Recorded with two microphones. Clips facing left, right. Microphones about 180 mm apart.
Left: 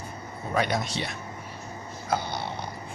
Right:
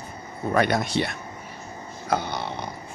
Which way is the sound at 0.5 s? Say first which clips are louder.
Right 5 dB; 55° right (ahead or behind).